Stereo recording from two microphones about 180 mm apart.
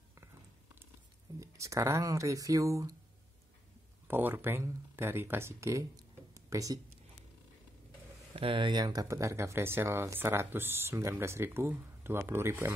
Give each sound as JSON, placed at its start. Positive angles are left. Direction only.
{"t": 1.4, "sound": "speech", "side_deg": -15}
{"t": 4.1, "sound": "speech", "side_deg": -10}
{"t": 8.3, "sound": "speech", "side_deg": -30}